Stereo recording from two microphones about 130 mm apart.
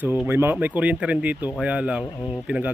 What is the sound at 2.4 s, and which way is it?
Speech, 10° right (ahead or behind).